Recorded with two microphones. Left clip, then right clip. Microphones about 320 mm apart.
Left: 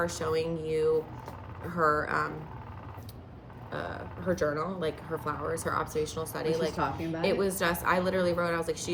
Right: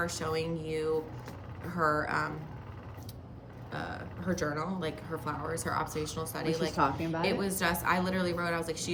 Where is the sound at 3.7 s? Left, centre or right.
Centre.